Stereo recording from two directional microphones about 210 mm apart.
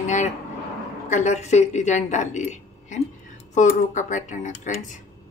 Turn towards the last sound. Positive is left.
turn(degrees=35)  # may be behind; listen again after turning